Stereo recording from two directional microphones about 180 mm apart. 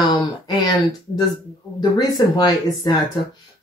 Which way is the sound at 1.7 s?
20° left (ahead or behind).